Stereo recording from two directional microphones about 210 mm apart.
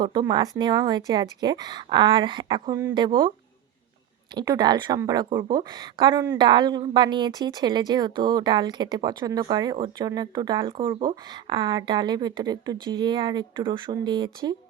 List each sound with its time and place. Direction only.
0.0 s a woman's voice: 20° right (ahead or behind)
4.4 s a woman's voice: 20° right (ahead or behind)